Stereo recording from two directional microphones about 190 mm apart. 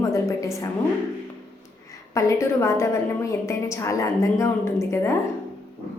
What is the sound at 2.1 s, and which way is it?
A woman's voice, 15° left (ahead or behind).